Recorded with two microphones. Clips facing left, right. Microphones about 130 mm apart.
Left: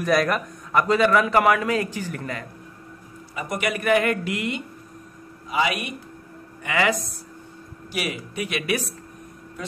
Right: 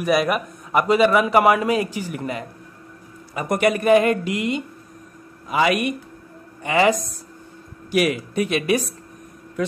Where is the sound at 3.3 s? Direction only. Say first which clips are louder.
Right 7 dB; 50° right (ahead or behind).